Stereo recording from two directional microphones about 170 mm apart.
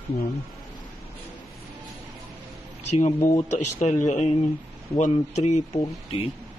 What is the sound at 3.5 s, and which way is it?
Speech, 45° left (ahead or behind).